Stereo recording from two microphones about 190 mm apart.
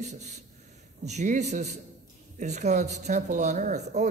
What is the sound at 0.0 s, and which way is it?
Speech, 35° right (ahead or behind).